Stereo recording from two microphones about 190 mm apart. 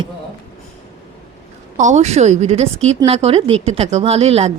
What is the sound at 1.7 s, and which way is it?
Speech, 40° right (ahead or behind).